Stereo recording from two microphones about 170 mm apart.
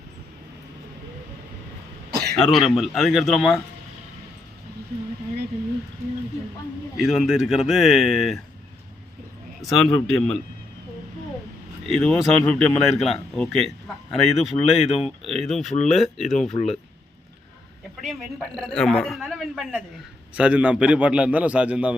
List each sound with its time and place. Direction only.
2.0 s throat clearing: 70° right (ahead or behind)
2.3 s speech: centre (ahead or behind)
6.9 s speech: centre (ahead or behind)
9.6 s speech: centre (ahead or behind)
11.9 s speech: 5° left (ahead or behind)
16.5 s speech: 40° left (ahead or behind)
18.0 s a man's voice: centre (ahead or behind)